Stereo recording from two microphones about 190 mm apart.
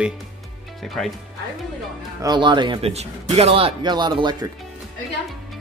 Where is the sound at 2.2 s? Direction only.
25° right (ahead or behind).